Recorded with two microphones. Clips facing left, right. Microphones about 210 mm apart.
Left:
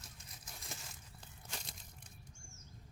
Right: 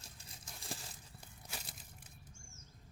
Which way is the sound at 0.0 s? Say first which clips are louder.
Even; 30° right (ahead or behind).